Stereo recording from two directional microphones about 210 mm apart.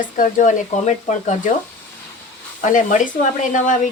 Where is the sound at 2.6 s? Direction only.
40° left (ahead or behind).